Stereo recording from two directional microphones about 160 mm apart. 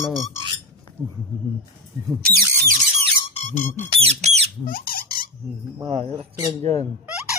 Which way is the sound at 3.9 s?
40° right (ahead or behind).